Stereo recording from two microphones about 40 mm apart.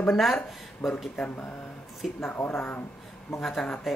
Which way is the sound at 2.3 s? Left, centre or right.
Left.